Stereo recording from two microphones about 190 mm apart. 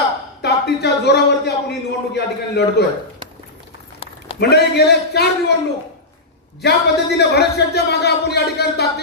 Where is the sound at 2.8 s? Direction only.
60° left (ahead or behind).